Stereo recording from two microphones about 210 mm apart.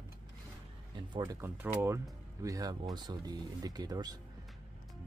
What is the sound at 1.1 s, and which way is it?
Speech, 20° right (ahead or behind).